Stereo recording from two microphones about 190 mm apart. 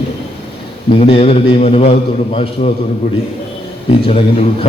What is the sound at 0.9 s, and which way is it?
A man's voice, 30° left (ahead or behind).